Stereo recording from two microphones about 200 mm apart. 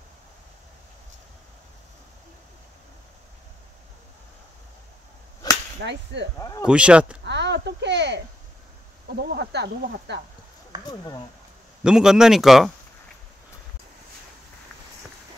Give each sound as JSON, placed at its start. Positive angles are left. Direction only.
{"t": 5.4, "sound": "whip", "side_deg": 20}
{"t": 5.8, "sound": "speech", "side_deg": -60}
{"t": 6.6, "sound": "speech", "side_deg": -5}
{"t": 7.2, "sound": "speech", "side_deg": -60}
{"t": 9.3, "sound": "speech", "side_deg": -55}
{"t": 11.8, "sound": "speech", "side_deg": -5}